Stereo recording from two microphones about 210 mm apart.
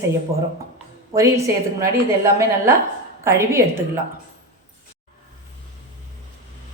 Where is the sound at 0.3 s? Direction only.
30° right (ahead or behind).